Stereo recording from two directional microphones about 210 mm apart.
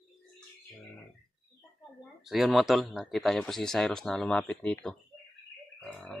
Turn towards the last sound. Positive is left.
turn(degrees=5)  # may be behind; listen again after turning